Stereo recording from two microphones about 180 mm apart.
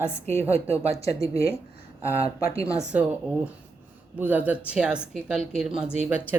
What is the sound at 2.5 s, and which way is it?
Speech, 15° left (ahead or behind).